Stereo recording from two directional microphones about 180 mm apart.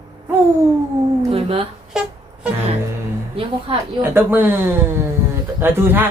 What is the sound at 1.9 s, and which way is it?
Music, 5° right (ahead or behind).